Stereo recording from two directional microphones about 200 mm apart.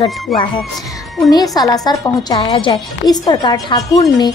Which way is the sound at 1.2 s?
20° left (ahead or behind).